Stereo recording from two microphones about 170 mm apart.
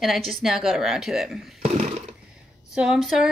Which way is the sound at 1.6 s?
35° right (ahead or behind).